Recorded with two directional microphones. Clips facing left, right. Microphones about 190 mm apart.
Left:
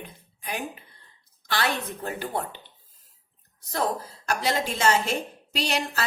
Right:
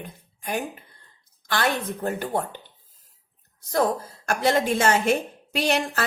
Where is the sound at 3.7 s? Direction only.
50° right (ahead or behind).